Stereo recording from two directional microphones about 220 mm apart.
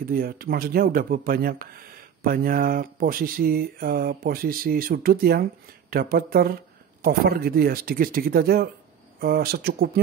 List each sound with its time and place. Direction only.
0.0 s speech: 40° right (ahead or behind)